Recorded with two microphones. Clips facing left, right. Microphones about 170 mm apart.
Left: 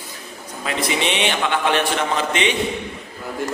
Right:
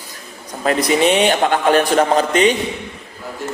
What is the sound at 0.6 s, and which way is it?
A man's voice, 45° right (ahead or behind).